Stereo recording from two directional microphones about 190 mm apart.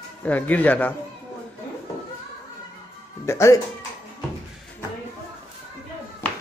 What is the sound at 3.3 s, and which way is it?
Speech, 15° left (ahead or behind).